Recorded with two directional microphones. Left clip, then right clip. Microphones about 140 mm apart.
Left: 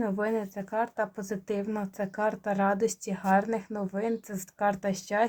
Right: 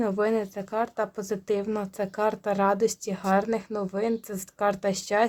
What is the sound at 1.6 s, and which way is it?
Speech, 55° right (ahead or behind).